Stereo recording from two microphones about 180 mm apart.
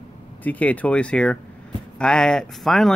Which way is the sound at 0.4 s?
10° left (ahead or behind).